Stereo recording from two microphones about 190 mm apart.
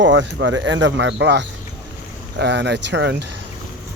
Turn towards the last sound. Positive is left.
turn(degrees=-65)  # may be behind; listen again after turning